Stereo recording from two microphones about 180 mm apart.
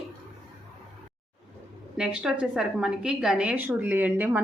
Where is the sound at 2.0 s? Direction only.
5° right (ahead or behind).